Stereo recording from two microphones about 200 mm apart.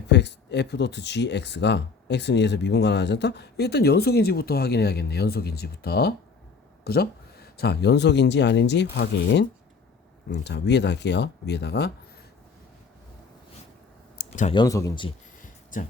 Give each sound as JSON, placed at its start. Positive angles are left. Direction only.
{"t": 0.1, "sound": "speech", "side_deg": 60}
{"t": 14.2, "sound": "a sound", "side_deg": 40}
{"t": 14.5, "sound": "speech", "side_deg": 20}